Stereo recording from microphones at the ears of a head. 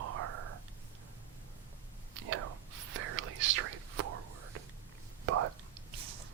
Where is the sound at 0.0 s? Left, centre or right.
Right.